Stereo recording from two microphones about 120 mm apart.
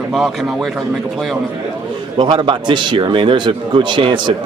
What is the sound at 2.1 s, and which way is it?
A man's voice, 40° right (ahead or behind).